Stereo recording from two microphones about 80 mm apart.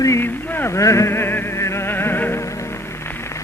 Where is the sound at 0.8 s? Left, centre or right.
Left.